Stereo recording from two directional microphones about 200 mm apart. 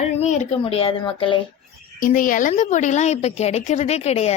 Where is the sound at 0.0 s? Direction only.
35° left (ahead or behind).